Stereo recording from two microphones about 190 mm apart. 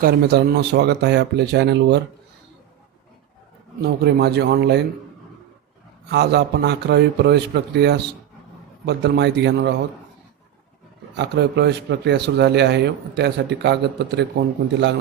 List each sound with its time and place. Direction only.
0.0 s a man's voice: 55° right (ahead or behind)
3.8 s a man's voice: 60° right (ahead or behind)
6.1 s a man's voice: 60° right (ahead or behind)
11.2 s a man's voice: 60° right (ahead or behind)